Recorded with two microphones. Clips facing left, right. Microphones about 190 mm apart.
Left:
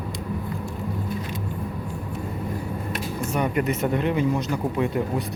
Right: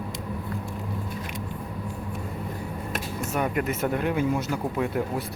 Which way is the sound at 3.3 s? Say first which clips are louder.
Left 2 dB; centre (ahead or behind).